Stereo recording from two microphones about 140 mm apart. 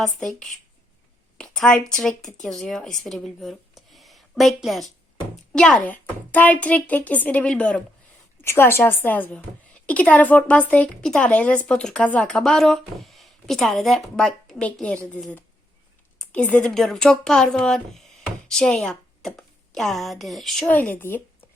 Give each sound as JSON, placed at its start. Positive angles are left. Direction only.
{"t": 0.0, "sound": "a woman's voice", "side_deg": 5}